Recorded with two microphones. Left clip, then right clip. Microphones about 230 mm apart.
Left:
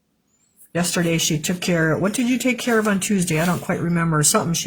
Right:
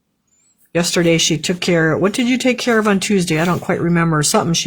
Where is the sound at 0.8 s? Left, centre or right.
Right.